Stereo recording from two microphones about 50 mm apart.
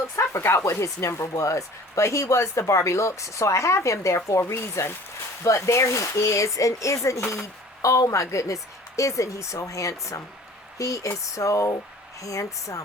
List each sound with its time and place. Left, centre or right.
0.4 s speech: left
5.4 s speech: left